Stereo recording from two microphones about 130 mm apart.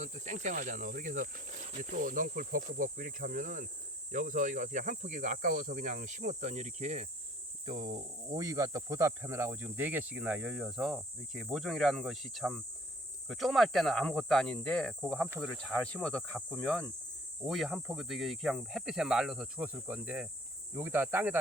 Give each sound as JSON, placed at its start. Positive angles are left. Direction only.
{"t": 0.0, "sound": "speech", "side_deg": -65}
{"t": 7.6, "sound": "speech", "side_deg": -40}
{"t": 8.4, "sound": "speech", "side_deg": -25}